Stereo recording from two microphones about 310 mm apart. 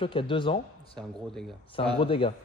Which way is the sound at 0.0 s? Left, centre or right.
Centre.